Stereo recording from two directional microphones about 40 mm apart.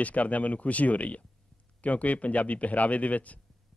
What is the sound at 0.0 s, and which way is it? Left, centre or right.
Speech, left.